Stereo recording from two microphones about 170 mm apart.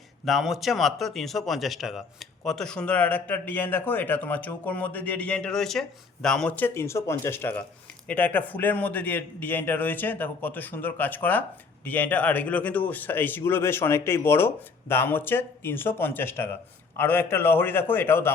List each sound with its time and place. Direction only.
0.3 s a man's voice: centre (ahead or behind)